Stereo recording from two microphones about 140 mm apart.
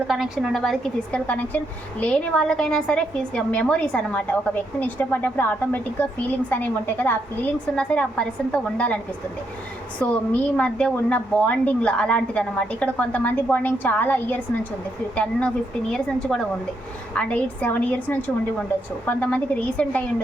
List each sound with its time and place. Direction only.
0.1 s a woman's voice: centre (ahead or behind)
1.3 s a woman's voice: 10° left (ahead or behind)
10.0 s a woman's voice: 10° left (ahead or behind)